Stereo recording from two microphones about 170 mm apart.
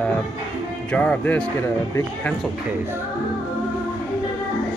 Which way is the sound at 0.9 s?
10° left (ahead or behind).